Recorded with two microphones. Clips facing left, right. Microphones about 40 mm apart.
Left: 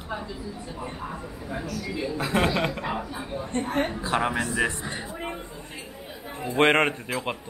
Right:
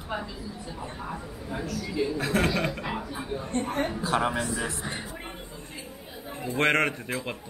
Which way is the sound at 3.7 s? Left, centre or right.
Left.